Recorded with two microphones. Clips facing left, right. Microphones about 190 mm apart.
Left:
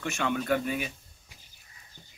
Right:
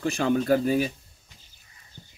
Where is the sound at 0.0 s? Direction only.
35° right (ahead or behind).